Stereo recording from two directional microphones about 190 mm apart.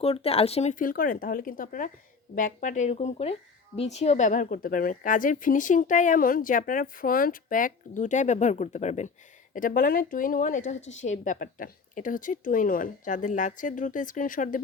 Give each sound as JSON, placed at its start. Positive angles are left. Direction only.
{"t": 0.0, "sound": "a woman's voice", "side_deg": 30}